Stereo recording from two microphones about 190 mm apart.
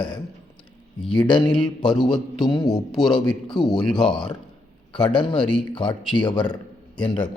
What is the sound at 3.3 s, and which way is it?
Speech, 25° left (ahead or behind).